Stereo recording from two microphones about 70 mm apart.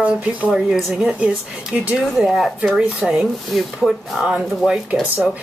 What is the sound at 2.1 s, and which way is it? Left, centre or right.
A woman's voice, centre.